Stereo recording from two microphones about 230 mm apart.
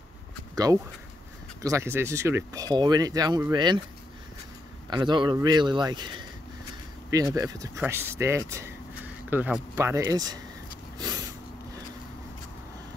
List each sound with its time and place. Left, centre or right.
1.6 s speech: centre
4.8 s a man's voice: centre
11.0 s a sound: centre